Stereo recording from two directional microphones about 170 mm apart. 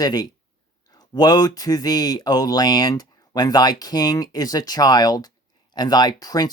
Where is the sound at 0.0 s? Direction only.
20° left (ahead or behind).